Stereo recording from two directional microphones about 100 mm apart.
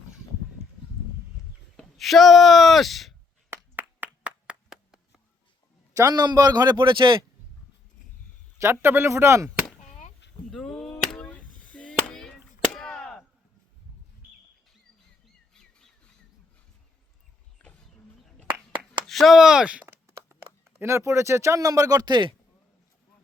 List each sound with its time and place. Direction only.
1.7 s speech: centre (ahead or behind)
3.5 s clapping: 20° right (ahead or behind)
5.9 s a man's voice: 35° right (ahead or behind); by 7.2 s 55° right (ahead or behind)
8.5 s speech: 25° right (ahead or behind)
10.5 s chop: 5° left (ahead or behind)
17.6 s vehicle: 15° left (ahead or behind)
19.0 s a sound: centre (ahead or behind)
20.7 s speech: 25° right (ahead or behind); by 22.4 s 50° right (ahead or behind)